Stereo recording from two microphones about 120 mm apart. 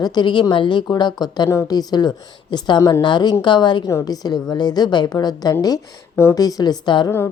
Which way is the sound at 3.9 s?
30° left (ahead or behind).